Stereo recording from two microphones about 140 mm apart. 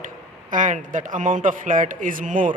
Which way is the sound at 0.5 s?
65° right (ahead or behind).